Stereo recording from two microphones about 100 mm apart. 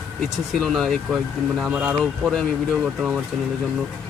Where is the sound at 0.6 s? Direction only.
5° left (ahead or behind).